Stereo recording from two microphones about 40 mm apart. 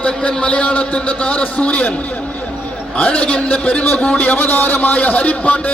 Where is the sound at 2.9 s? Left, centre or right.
Left.